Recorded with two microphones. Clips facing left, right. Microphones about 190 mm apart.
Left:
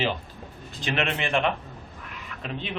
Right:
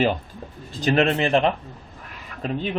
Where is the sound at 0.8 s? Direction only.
40° right (ahead or behind).